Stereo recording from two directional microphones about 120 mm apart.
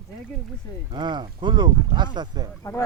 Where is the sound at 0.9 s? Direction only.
40° right (ahead or behind).